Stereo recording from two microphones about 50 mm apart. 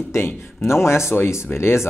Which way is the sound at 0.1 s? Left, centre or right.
Left.